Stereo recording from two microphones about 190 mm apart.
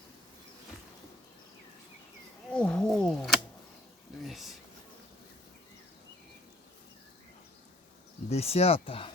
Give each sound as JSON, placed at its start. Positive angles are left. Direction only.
{"t": 2.5, "sound": "wild animals", "side_deg": 5}
{"t": 4.3, "sound": "a sound", "side_deg": 0}
{"t": 8.3, "sound": "speech", "side_deg": 35}